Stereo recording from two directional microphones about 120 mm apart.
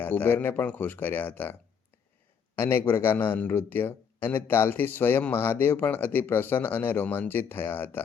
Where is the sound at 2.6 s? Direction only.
20° left (ahead or behind).